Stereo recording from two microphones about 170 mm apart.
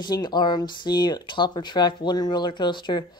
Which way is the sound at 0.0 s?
25° left (ahead or behind).